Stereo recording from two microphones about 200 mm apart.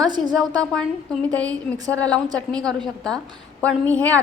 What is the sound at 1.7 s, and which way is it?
Speech, 15° right (ahead or behind).